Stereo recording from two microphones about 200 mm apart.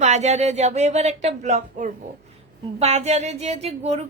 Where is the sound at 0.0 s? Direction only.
35° right (ahead or behind).